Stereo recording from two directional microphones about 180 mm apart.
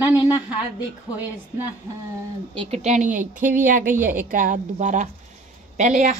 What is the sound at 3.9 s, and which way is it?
Speech, 10° right (ahead or behind).